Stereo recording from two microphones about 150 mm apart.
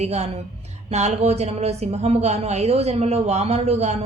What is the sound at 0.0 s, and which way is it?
Speech, 45° right (ahead or behind).